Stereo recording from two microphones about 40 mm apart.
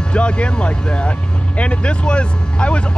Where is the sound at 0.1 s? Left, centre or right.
Left.